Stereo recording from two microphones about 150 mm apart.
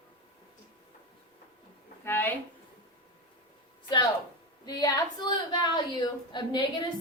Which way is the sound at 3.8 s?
30° left (ahead or behind).